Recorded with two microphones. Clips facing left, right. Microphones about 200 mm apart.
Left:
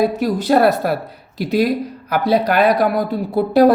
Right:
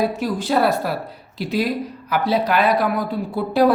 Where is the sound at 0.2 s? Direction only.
45° left (ahead or behind).